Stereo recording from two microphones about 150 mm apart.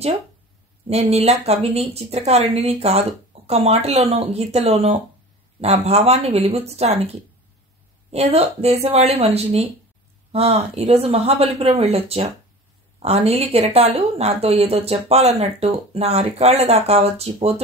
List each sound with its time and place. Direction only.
0.8 s a woman's voice: 45° right (ahead or behind)
8.1 s a woman's voice: 45° right (ahead or behind)